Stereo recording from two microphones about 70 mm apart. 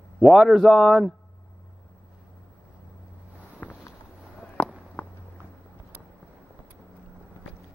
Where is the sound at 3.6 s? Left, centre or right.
Left.